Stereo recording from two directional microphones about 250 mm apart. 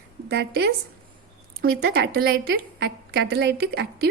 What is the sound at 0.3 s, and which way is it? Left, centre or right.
Speech, right.